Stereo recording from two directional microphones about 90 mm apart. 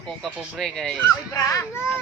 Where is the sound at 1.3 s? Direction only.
30° left (ahead or behind).